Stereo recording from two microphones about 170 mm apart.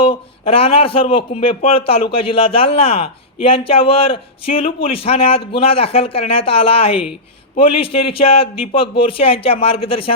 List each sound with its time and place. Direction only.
0.0 s speech: 30° left (ahead or behind)